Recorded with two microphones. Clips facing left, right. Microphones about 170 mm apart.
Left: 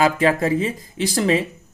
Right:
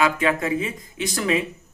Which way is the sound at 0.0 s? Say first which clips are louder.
Left 4 dB; 35° left (ahead or behind).